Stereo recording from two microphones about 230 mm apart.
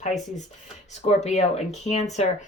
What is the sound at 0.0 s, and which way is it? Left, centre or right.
Speech, left.